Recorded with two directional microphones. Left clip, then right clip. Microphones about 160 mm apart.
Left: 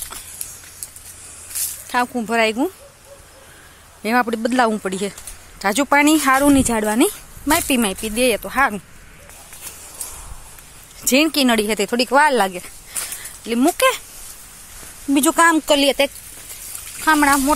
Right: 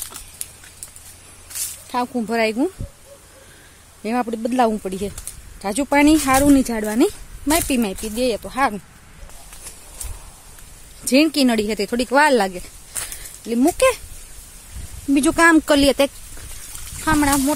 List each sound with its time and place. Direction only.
1.5 s snake: 50° left (ahead or behind)
1.9 s speech: 15° right (ahead or behind)
4.0 s speech: 5° right (ahead or behind)
5.9 s speech: 15° right (ahead or behind)
8.5 s speech: centre (ahead or behind)
11.1 s speech: 20° right (ahead or behind)
12.1 s speech: 30° right (ahead or behind)
13.5 s speech: 15° right (ahead or behind)
15.1 s speech: 25° right (ahead or behind)
15.5 s speech: 40° right (ahead or behind)
17.0 s speech: 15° right (ahead or behind)